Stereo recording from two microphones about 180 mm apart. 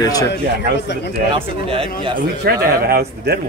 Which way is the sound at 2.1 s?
55° right (ahead or behind).